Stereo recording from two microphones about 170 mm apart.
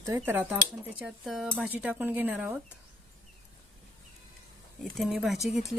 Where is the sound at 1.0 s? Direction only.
Centre (ahead or behind).